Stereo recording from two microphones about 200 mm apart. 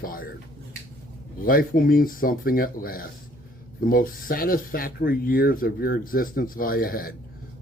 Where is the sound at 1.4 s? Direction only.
45° left (ahead or behind).